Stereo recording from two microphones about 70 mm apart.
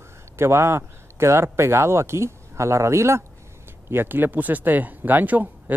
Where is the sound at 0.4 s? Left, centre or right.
Right.